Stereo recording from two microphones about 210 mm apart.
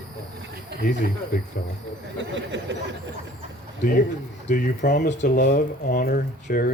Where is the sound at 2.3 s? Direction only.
60° right (ahead or behind).